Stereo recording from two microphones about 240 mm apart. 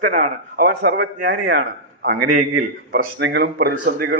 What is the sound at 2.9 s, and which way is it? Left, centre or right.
A man's voice, right.